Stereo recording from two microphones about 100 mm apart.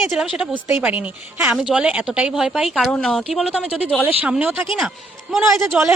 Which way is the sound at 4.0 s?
15° right (ahead or behind).